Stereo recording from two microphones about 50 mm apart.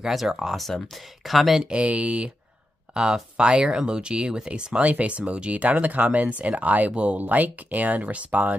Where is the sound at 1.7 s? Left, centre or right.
Right.